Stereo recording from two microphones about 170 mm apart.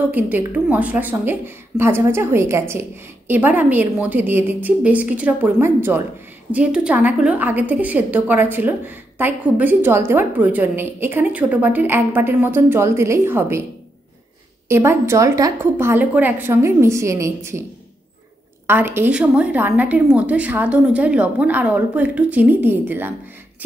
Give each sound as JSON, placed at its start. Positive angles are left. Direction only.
{"t": 0.0, "sound": "a woman's voice", "side_deg": -10}
{"t": 14.7, "sound": "a woman's voice", "side_deg": -15}
{"t": 18.7, "sound": "a woman's voice", "side_deg": -15}